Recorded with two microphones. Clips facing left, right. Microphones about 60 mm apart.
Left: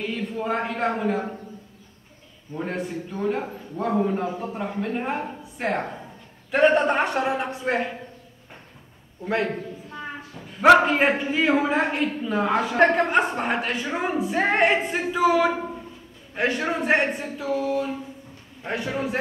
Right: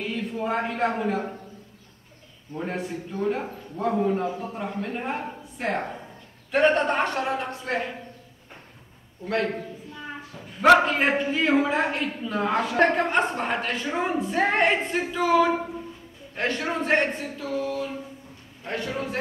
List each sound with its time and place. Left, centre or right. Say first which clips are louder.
0.0 s a man's voice: left 1 dB; centre
2.5 s a man's voice: left 1 dB; centre
7.2 s a man's voice: left 3 dB; centre
9.2 s a man's voice: left 1 dB; centre
10.6 s a man's voice: left 2 dB; centre
18.6 s a man's voice: left 2 dB; centre